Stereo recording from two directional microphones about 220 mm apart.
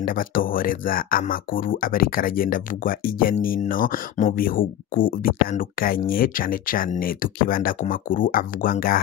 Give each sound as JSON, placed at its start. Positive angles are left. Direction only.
{"t": 0.0, "sound": "speech", "side_deg": 40}